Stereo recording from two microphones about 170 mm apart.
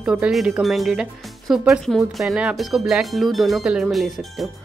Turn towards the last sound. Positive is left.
turn(degrees=0)  # may be behind; listen again after turning